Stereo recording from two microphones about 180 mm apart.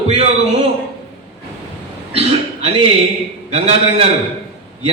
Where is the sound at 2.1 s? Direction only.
35° right (ahead or behind).